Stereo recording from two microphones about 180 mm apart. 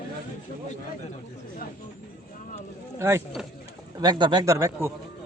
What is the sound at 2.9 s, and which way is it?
Speech, 15° right (ahead or behind).